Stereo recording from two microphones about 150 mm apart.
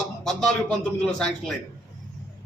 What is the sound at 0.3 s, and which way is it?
A man's voice, 5° left (ahead or behind).